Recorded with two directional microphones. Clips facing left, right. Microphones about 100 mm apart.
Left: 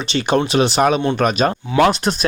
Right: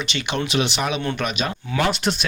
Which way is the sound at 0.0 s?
35° left (ahead or behind).